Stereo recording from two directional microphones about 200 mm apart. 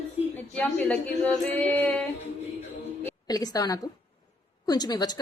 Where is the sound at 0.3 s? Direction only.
10° left (ahead or behind).